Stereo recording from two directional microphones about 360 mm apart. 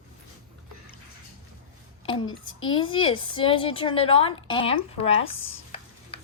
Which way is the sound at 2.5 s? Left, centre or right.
Left.